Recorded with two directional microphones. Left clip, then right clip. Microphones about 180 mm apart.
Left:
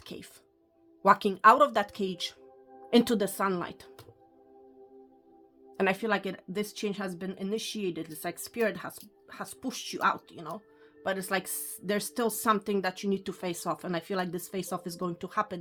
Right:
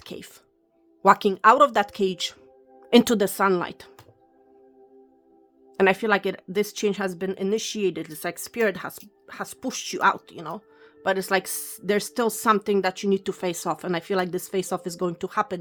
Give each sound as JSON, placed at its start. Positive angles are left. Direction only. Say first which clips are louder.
{"t": 0.0, "sound": "speech", "louder": "right 6 dB", "side_deg": -30}
{"t": 5.7, "sound": "speech", "louder": "right 8 dB", "side_deg": -35}